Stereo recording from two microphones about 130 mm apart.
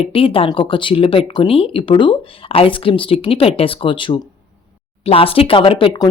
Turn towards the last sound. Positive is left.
turn(degrees=40)  # may be behind; listen again after turning